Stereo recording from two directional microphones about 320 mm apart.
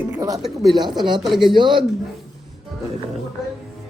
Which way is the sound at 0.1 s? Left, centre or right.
Centre.